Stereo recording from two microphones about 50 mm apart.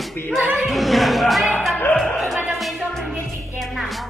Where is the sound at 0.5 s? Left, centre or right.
Centre.